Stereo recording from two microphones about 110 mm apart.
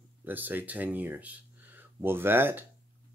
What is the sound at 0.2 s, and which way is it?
Speech, 15° right (ahead or behind).